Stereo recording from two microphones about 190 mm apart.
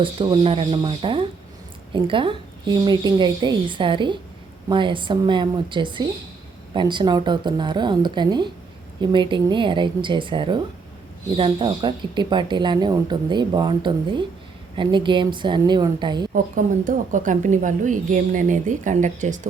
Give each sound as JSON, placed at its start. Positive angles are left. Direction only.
{"t": 0.0, "sound": "speech", "side_deg": -25}
{"t": 16.3, "sound": "speech", "side_deg": -45}